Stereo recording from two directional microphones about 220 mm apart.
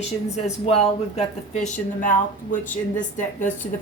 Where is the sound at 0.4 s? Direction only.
30° left (ahead or behind).